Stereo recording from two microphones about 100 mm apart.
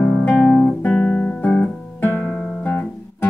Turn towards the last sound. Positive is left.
turn(degrees=15)  # may be behind; listen again after turning